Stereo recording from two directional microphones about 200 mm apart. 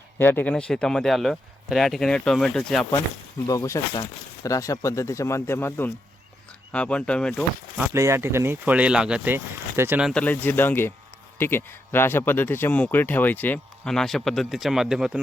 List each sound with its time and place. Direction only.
0.2 s speech: 10° left (ahead or behind)
3.4 s speech: 15° left (ahead or behind)
7.8 s speech: 15° right (ahead or behind)
10.1 s speech: 5° left (ahead or behind)